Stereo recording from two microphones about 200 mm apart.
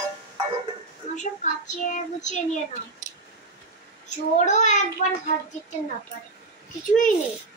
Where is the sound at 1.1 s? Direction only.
40° left (ahead or behind).